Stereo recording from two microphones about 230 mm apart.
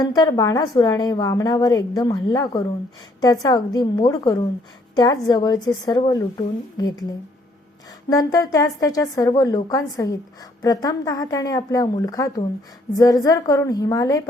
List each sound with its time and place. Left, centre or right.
0.0 s a woman's voice: centre
8.1 s a woman's voice: centre